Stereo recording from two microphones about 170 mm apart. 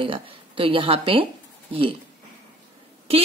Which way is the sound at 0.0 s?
30° right (ahead or behind).